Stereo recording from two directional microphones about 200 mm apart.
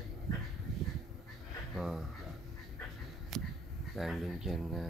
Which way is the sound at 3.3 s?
Centre (ahead or behind).